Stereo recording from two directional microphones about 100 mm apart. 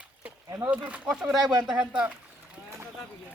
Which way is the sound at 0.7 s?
15° right (ahead or behind).